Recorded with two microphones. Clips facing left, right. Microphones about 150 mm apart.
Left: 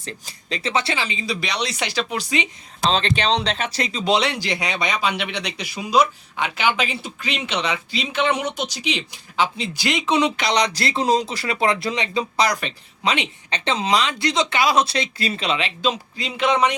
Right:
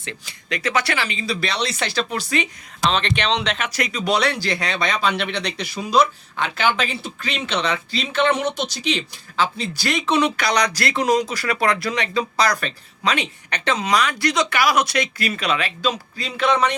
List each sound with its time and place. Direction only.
0.0 s speech: 40° left (ahead or behind)
0.6 s speech: 25° left (ahead or behind)
2.8 s speech: 30° left (ahead or behind); by 16.7 s 15° left (ahead or behind)